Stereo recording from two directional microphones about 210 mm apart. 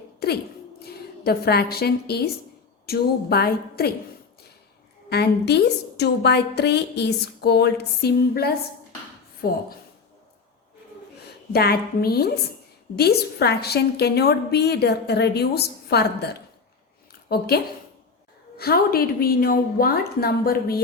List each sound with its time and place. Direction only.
0.2 s a woman's voice: 50° left (ahead or behind)
5.0 s a woman's voice: 50° left (ahead or behind)
11.5 s a woman's voice: 45° left (ahead or behind)
17.1 s a sound: 50° left (ahead or behind)
18.5 s a woman's voice: 45° left (ahead or behind)